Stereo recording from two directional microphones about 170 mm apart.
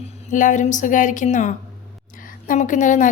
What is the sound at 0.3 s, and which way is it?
Speech, 50° left (ahead or behind).